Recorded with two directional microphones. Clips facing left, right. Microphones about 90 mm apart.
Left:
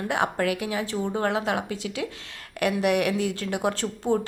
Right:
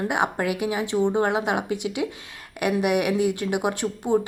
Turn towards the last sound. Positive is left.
turn(degrees=-15)  # may be behind; listen again after turning